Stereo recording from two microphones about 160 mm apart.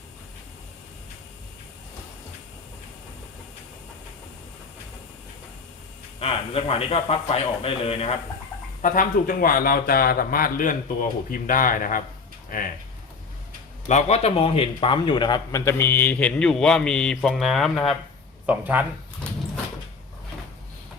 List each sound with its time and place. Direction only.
6.1 s a man's voice: 35° left (ahead or behind)
8.8 s a man's voice: 60° left (ahead or behind)
13.8 s speech: 45° left (ahead or behind); by 17.9 s centre (ahead or behind)
18.4 s speech: 10° right (ahead or behind)